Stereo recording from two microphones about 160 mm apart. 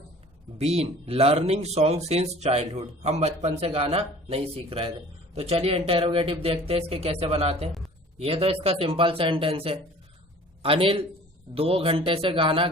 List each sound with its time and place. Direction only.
0.6 s a man's voice: 40° right (ahead or behind)